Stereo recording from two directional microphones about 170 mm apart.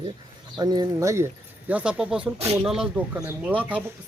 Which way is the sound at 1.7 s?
5° right (ahead or behind).